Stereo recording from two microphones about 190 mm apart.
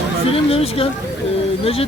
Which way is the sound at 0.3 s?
30° left (ahead or behind).